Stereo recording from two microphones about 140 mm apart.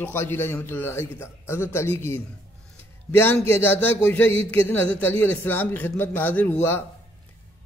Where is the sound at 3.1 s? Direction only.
15° left (ahead or behind).